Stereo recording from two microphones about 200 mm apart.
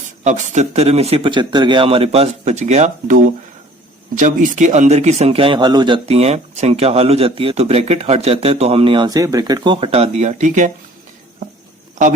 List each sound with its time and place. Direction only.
0.3 s a man's voice: 35° right (ahead or behind)